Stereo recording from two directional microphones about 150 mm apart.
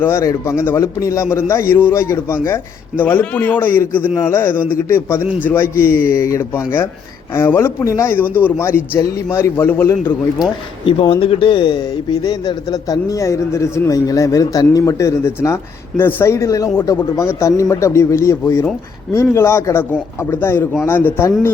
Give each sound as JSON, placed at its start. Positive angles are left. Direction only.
{"t": 0.0, "sound": "a man's voice", "side_deg": 20}
{"t": 10.4, "sound": "a man's voice", "side_deg": 30}